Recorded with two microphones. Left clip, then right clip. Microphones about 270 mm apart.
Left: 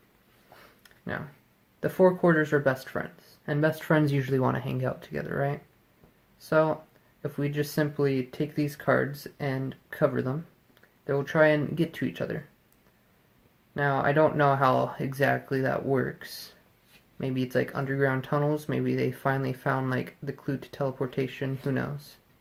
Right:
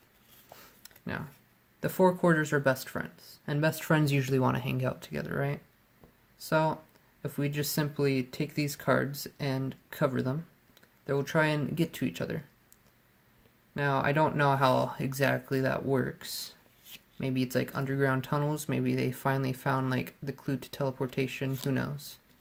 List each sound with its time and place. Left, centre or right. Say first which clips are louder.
1.8 s speech: left 3 dB; right
13.7 s speech: left 3 dB; right
17.5 s speech: left 4 dB; right